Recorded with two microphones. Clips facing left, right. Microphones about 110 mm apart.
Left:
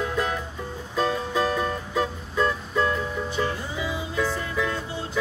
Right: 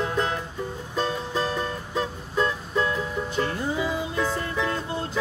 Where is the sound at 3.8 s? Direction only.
50° right (ahead or behind).